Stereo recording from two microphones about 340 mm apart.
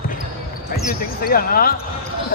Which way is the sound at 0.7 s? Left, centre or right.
Left.